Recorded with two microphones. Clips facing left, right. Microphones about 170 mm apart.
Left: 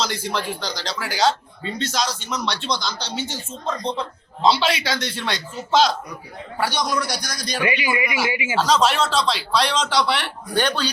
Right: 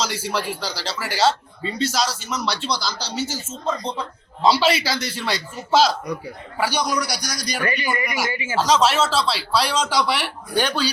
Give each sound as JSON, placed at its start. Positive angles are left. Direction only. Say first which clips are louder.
{"t": 0.0, "sound": "speech", "louder": "even", "side_deg": -5}
{"t": 7.6, "sound": "speech", "louder": "left 2 dB", "side_deg": 10}
{"t": 8.6, "sound": "speech", "louder": "right 1 dB", "side_deg": -5}